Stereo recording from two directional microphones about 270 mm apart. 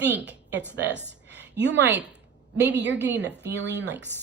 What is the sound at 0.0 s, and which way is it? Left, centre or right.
A woman's voice, right.